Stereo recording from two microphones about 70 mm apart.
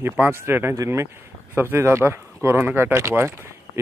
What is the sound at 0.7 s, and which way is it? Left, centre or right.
Speech, right.